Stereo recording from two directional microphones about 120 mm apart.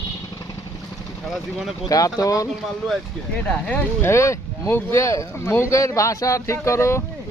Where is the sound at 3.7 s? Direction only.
20° left (ahead or behind).